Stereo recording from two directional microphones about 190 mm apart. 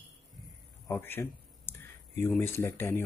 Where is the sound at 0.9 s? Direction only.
10° left (ahead or behind).